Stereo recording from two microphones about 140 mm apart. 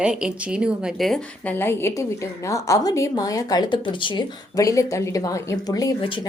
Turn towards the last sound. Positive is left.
turn(degrees=35)  # may be behind; listen again after turning